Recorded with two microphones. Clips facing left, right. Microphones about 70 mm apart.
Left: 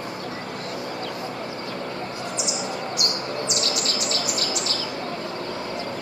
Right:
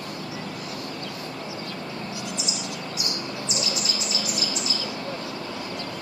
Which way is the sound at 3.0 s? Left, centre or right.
Left.